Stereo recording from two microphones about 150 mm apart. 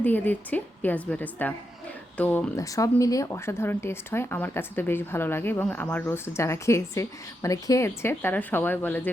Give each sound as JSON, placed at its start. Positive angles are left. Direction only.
{"t": 0.0, "sound": "speech", "side_deg": 10}
{"t": 2.6, "sound": "speech", "side_deg": 20}